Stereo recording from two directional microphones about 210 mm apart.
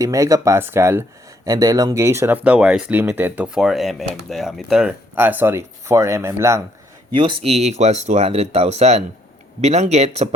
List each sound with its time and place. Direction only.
0.0 s speech: 15° right (ahead or behind)
7.2 s speech: 25° right (ahead or behind)